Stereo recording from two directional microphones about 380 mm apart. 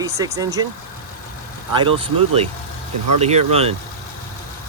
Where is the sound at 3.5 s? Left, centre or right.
Centre.